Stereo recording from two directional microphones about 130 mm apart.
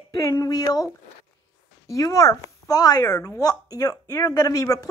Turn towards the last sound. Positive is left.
turn(degrees=25)  # may be behind; listen again after turning